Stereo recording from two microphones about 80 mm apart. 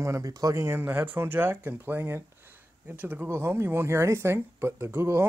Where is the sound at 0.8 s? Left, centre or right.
Right.